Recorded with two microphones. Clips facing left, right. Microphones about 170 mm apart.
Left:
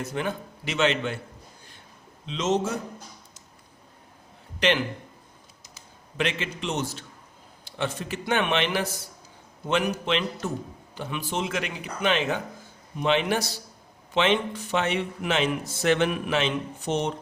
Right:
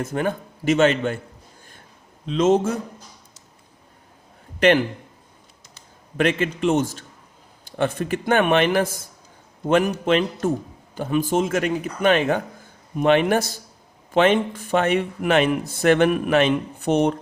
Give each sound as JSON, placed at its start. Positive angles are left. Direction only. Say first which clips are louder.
{"t": 0.0, "sound": "a man's voice", "louder": "right 5 dB", "side_deg": -50}
{"t": 2.2, "sound": "a man's voice", "louder": "right 7 dB", "side_deg": -50}
{"t": 6.1, "sound": "a man's voice", "louder": "right 8 dB", "side_deg": -50}